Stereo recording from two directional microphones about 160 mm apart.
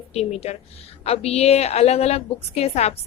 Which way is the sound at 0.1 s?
40° left (ahead or behind).